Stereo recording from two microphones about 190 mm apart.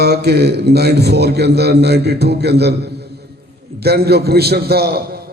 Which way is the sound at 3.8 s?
55° right (ahead or behind).